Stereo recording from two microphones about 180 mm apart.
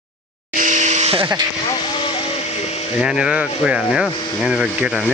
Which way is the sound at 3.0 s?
5° right (ahead or behind).